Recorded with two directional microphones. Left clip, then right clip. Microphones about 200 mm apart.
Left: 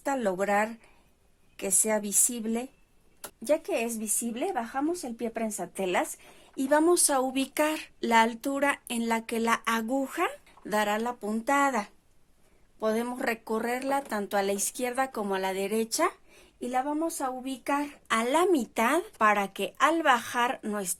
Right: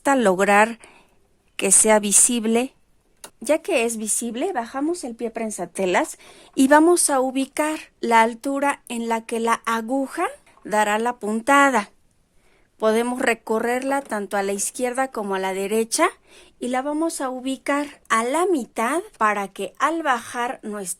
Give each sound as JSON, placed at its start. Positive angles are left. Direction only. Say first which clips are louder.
{"t": 0.0, "sound": "speech", "louder": "right 10 dB", "side_deg": -45}
{"t": 18.1, "sound": "a woman's voice", "louder": "right 5 dB", "side_deg": -25}